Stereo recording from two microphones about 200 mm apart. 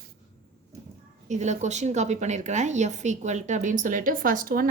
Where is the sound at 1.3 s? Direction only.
35° right (ahead or behind).